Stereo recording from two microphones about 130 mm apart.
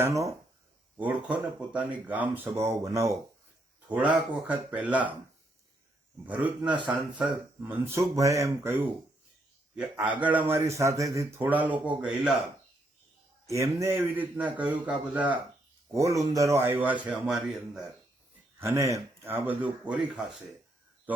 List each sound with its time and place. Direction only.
0.9 s a man's voice: 10° right (ahead or behind)
3.8 s a man's voice: 10° right (ahead or behind)
6.2 s a man's voice: 10° right (ahead or behind)
9.7 s a man's voice: 10° right (ahead or behind)
13.5 s a man's voice: 25° right (ahead or behind)
15.9 s a man's voice: 25° right (ahead or behind); by 17.8 s 5° right (ahead or behind)
18.6 s a man's voice: 20° right (ahead or behind)